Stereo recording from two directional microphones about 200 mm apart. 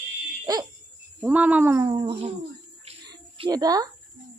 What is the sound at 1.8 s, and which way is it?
Speech, 20° right (ahead or behind).